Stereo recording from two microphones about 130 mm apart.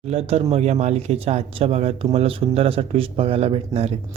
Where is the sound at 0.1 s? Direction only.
50° right (ahead or behind).